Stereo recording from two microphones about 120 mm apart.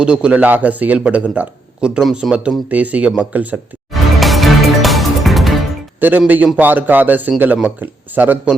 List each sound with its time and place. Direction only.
0.0 s a man's voice: 10° right (ahead or behind)
3.9 s music: centre (ahead or behind)
6.0 s a man's voice: 15° right (ahead or behind)